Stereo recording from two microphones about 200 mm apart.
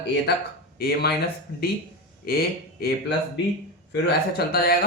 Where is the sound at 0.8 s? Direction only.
50° left (ahead or behind).